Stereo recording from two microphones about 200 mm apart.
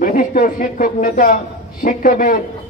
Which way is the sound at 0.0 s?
45° left (ahead or behind).